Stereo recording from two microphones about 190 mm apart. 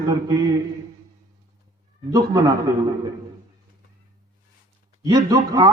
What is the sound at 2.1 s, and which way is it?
Speech, 20° right (ahead or behind).